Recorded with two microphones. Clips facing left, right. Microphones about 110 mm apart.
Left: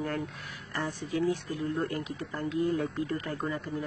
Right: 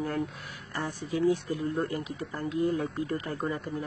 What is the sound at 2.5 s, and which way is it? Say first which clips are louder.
Speech: right 1 dB; 30° right (ahead or behind).